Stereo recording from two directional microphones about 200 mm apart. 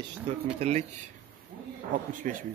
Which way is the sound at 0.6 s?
35° right (ahead or behind).